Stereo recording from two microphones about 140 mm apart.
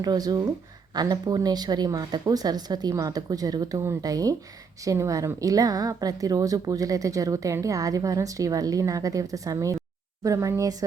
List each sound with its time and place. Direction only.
0.0 s a woman's voice: 25° right (ahead or behind)